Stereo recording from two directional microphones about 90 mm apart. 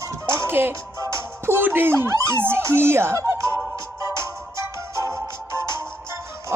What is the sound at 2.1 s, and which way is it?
A child's voice, 30° right (ahead or behind).